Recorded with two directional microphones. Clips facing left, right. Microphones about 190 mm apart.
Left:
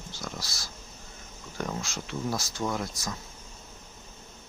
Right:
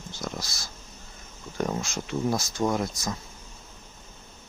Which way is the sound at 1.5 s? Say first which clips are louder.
Right 5 dB; 30° right (ahead or behind).